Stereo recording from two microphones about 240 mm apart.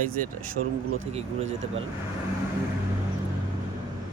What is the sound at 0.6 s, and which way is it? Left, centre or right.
Speech, right.